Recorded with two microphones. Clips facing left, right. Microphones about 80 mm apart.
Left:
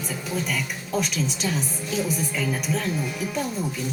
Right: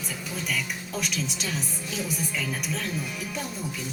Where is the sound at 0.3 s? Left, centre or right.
Centre.